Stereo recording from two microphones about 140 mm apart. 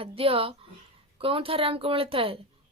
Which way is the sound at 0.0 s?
40° right (ahead or behind).